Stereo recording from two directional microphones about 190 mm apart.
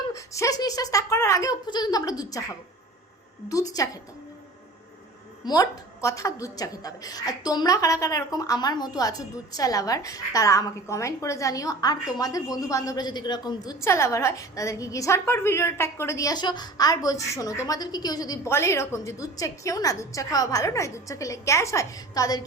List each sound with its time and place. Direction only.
0.1 s a woman's voice: 15° left (ahead or behind)
5.5 s a woman's voice: 15° left (ahead or behind)